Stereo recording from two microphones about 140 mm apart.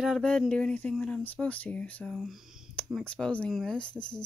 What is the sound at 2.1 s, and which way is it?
Speech, 5° right (ahead or behind).